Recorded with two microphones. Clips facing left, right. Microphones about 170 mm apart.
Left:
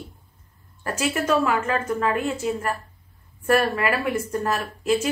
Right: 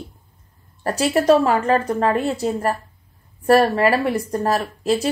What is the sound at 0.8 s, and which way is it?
Speech, 35° right (ahead or behind).